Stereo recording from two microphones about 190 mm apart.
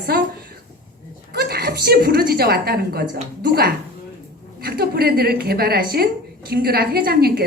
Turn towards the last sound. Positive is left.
turn(degrees=-50)  # may be behind; listen again after turning